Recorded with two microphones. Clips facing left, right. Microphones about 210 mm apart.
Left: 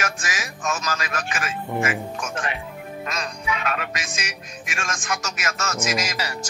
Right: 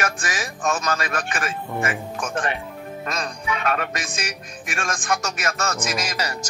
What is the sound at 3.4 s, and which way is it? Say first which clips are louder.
Speech: right 3 dB; 50° right (ahead or behind).